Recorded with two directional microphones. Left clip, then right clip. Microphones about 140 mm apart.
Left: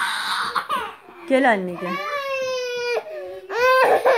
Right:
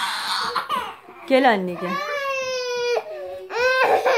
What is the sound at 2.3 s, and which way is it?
Baby cry, 60° left (ahead or behind).